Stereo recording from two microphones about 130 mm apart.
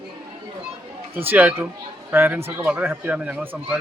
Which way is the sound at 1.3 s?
15° right (ahead or behind).